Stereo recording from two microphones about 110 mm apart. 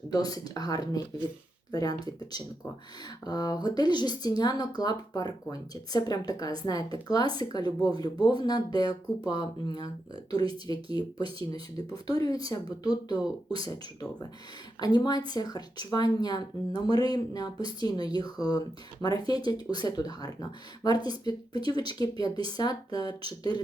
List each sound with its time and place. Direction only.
0.1 s speech: 35° left (ahead or behind)
11.2 s speech: 55° right (ahead or behind)
11.5 s speech: 35° left (ahead or behind)